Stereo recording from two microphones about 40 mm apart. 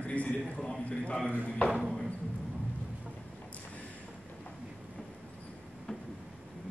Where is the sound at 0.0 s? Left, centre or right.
Left.